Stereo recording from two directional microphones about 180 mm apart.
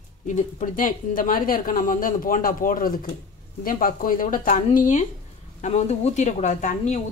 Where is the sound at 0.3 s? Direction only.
45° left (ahead or behind).